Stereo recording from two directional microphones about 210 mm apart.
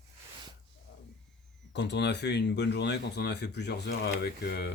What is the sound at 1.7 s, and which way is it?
Speech, 55° left (ahead or behind).